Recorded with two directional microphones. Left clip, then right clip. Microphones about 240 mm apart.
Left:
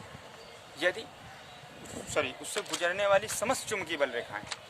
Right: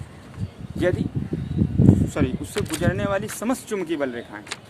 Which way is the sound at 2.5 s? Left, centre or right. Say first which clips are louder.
Right 7 dB; right.